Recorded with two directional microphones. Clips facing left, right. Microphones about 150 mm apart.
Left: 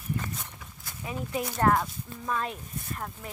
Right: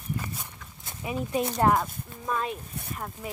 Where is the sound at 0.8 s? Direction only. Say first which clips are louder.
Right 4 dB; 15° right (ahead or behind).